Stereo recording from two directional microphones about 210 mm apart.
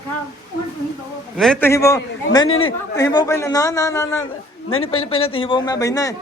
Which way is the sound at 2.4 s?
75° left (ahead or behind).